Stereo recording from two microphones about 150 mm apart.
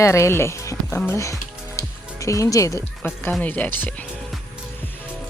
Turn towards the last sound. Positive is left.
turn(degrees=10)  # may be behind; listen again after turning